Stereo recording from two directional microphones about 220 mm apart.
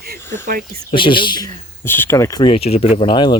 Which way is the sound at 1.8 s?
10° left (ahead or behind).